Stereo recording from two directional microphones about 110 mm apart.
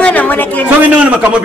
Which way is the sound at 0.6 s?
10° right (ahead or behind).